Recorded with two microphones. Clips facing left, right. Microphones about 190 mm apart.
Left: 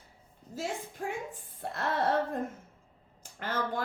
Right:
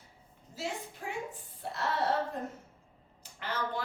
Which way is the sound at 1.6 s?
55° left (ahead or behind).